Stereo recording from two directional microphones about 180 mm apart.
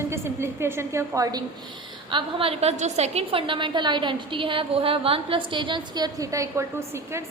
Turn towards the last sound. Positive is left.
turn(degrees=-15)  # may be behind; listen again after turning